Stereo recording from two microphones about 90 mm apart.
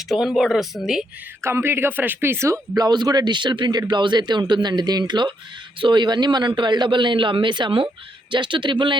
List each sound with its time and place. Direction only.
0.1 s speech: centre (ahead or behind)
1.4 s speech: 25° right (ahead or behind)
2.7 s a man's voice: 50° right (ahead or behind)